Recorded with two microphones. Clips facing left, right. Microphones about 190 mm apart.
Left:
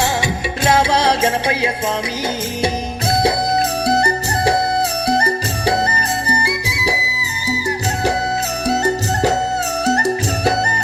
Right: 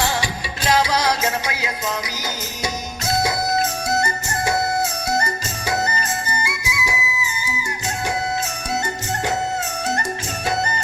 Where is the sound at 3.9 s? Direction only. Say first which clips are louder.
Left 6 dB; 35° left (ahead or behind).